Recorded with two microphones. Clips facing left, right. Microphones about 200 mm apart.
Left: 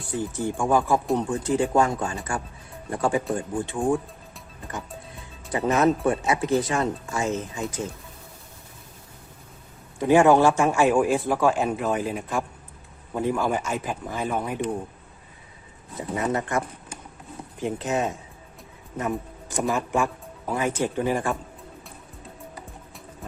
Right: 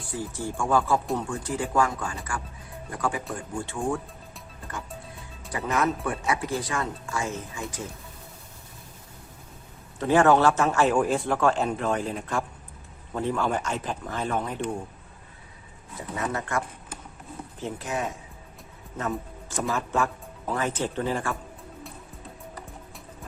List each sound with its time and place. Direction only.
0.1 s a man's voice: 20° left (ahead or behind)
5.5 s speech: 25° left (ahead or behind)
10.0 s a man's voice: 15° left (ahead or behind)
16.0 s a man's voice: 20° left (ahead or behind)